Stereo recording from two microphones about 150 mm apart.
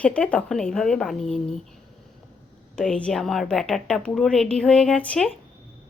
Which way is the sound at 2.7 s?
5° left (ahead or behind).